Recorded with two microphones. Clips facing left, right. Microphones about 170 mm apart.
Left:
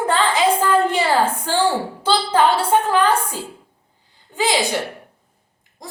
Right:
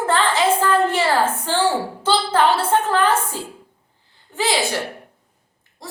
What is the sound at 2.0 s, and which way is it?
A woman's voice, 15° left (ahead or behind).